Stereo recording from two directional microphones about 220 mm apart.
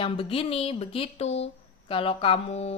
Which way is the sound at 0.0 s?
25° left (ahead or behind).